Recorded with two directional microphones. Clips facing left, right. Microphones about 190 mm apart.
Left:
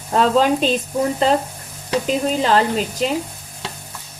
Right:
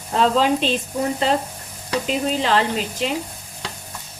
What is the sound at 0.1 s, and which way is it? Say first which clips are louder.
Speech: left 2 dB; 45° left (ahead or behind).